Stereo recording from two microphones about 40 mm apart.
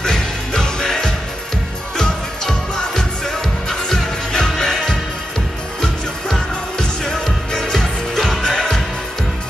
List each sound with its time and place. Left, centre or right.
0.0 s music: centre
5.8 s music: centre